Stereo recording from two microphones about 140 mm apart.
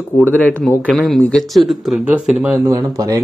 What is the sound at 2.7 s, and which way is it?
Speech, 25° right (ahead or behind).